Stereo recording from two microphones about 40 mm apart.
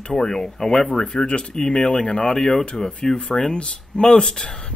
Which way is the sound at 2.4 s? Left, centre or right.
Centre.